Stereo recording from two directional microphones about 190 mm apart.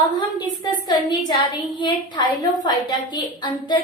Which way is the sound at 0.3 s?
20° left (ahead or behind).